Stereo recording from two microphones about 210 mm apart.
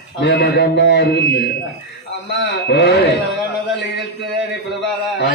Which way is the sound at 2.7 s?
55° left (ahead or behind).